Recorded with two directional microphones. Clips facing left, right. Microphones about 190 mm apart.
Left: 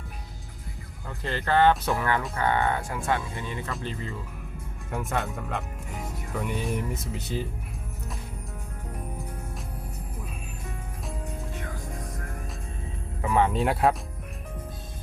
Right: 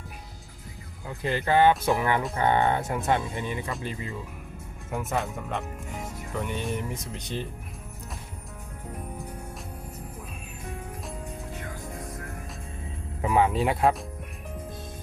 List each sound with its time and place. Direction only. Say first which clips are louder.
1.0 s speech: right 3 dB; 15° right (ahead or behind)
4.9 s speech: even; centre (ahead or behind)
13.2 s speech: right 1 dB; 10° right (ahead or behind)